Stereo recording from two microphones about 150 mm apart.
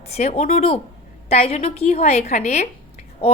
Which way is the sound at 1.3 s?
45° left (ahead or behind).